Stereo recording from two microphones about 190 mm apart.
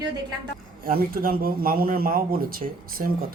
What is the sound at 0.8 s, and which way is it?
Speech, 50° right (ahead or behind).